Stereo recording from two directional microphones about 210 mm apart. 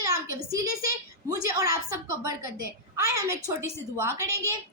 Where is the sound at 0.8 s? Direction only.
15° right (ahead or behind).